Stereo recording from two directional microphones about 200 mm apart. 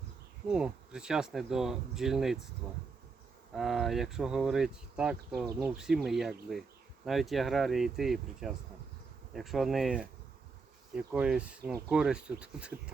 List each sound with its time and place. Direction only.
0.4 s speech: 5° right (ahead or behind)
3.5 s speech: centre (ahead or behind)